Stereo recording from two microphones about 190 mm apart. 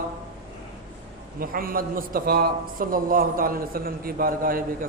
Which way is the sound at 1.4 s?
50° right (ahead or behind).